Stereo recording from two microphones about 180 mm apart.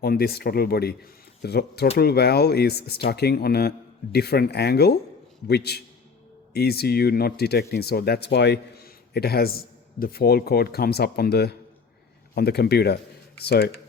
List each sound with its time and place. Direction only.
0.0 s speech: 60° left (ahead or behind)